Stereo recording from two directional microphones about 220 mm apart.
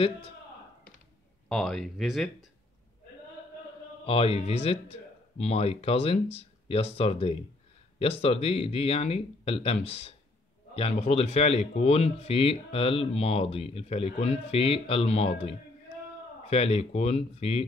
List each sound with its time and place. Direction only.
1.5 s speech: centre (ahead or behind)
4.0 s speech: 25° left (ahead or behind)